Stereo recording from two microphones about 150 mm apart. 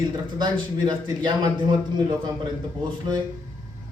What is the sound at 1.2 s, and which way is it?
Speech, 30° right (ahead or behind).